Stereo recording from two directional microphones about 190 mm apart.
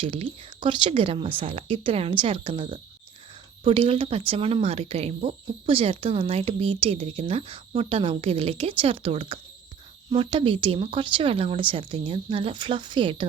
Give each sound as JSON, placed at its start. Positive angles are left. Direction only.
{"t": 0.0, "sound": "speech", "side_deg": -30}